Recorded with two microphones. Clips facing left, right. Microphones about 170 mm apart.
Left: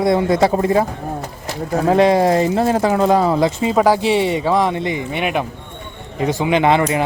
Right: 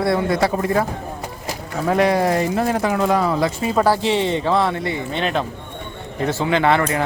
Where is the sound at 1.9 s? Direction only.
25° left (ahead or behind).